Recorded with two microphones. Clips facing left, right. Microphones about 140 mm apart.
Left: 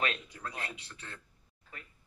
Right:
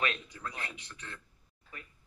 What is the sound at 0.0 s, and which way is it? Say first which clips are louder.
Speech: even; 30° left (ahead or behind).